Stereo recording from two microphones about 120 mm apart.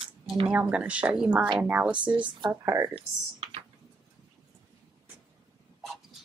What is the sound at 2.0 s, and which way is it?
Speech, 40° right (ahead or behind).